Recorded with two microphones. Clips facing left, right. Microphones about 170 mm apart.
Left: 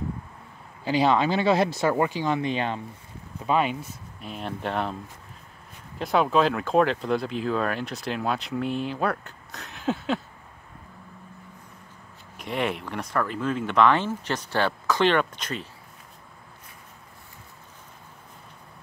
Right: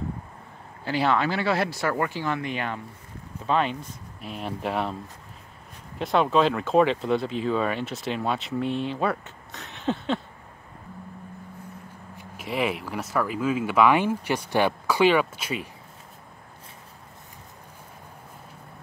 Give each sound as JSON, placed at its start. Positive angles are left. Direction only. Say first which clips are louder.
{"t": 0.8, "sound": "speech", "louder": "left 2 dB", "side_deg": 15}
{"t": 3.4, "sound": "speech", "louder": "left 1 dB", "side_deg": 10}
{"t": 5.9, "sound": "speech", "louder": "even", "side_deg": 0}
{"t": 12.4, "sound": "speech", "louder": "right 1 dB", "side_deg": -5}